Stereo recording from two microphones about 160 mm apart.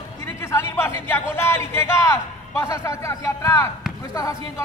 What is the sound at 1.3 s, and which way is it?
A man's voice, 15° left (ahead or behind).